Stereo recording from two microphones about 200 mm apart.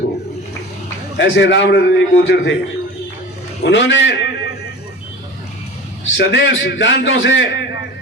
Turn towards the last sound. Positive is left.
turn(degrees=65)  # may be behind; listen again after turning